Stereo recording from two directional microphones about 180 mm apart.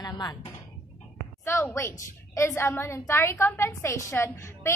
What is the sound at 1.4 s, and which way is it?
A woman's voice, 15° left (ahead or behind).